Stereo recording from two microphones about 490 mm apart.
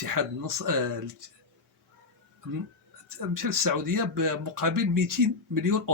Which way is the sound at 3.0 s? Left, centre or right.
Right.